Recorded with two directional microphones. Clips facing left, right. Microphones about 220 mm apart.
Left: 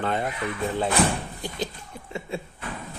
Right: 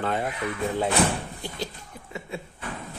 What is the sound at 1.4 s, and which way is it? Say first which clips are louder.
Chuckle: left 2 dB; 20° left (ahead or behind).